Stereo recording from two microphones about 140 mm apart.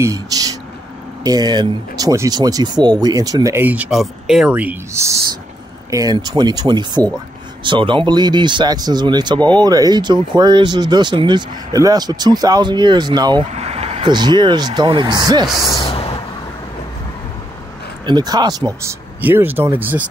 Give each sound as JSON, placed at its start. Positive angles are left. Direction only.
{"t": 0.0, "sound": "speech", "side_deg": -25}
{"t": 3.6, "sound": "speech", "side_deg": -10}
{"t": 13.5, "sound": "vehicle", "side_deg": -50}
{"t": 14.0, "sound": "speech", "side_deg": -30}
{"t": 15.4, "sound": "speech", "side_deg": 0}
{"t": 18.0, "sound": "speech", "side_deg": -30}